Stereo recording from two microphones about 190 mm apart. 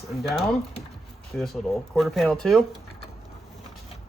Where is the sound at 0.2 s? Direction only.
Centre (ahead or behind).